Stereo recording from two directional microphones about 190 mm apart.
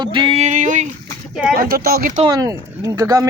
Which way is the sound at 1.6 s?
50° right (ahead or behind).